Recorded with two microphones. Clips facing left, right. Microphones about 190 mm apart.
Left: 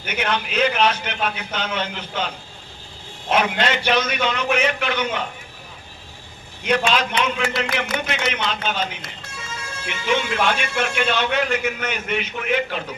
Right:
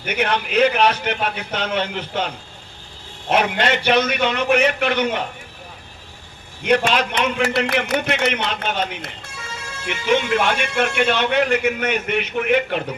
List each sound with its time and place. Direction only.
0.0 s a man's voice: 60° right (ahead or behind)
6.6 s a man's voice: 60° right (ahead or behind)
10.1 s a man's voice: 60° right (ahead or behind)